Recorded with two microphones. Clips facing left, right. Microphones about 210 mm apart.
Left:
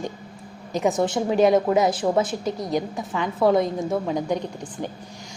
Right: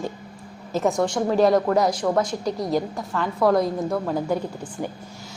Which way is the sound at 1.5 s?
20° left (ahead or behind).